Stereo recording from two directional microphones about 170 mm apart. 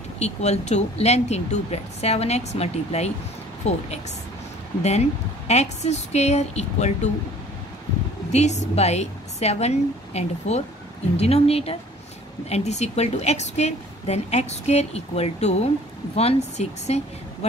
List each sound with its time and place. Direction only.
0.2 s a woman's voice: 40° left (ahead or behind)
5.5 s a woman's voice: 40° left (ahead or behind)
8.3 s a woman's voice: 40° left (ahead or behind)